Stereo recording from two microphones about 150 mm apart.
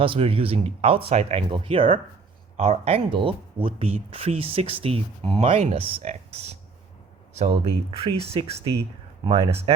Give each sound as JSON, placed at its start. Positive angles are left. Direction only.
{"t": 0.0, "sound": "speech", "side_deg": -35}